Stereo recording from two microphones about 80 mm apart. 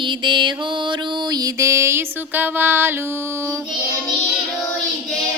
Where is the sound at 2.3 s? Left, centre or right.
Right.